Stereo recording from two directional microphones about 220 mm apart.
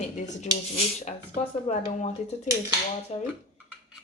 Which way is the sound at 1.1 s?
30° left (ahead or behind).